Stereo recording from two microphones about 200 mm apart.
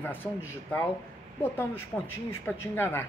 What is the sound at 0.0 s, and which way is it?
Speech, 10° left (ahead or behind).